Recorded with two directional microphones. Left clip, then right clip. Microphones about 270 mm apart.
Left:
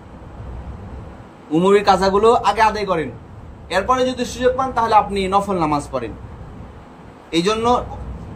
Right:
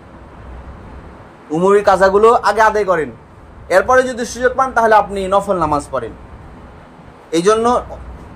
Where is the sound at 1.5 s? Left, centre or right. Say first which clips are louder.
Right 2 dB; centre.